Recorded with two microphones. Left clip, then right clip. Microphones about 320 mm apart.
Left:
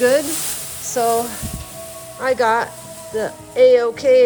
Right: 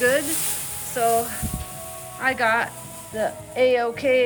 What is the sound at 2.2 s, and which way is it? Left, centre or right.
Speech, centre.